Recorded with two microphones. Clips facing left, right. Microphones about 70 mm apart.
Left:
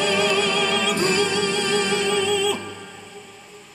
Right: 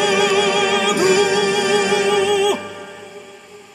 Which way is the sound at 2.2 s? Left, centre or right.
Right.